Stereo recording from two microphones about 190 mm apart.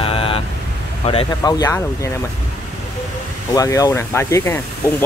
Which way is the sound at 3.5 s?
20° left (ahead or behind).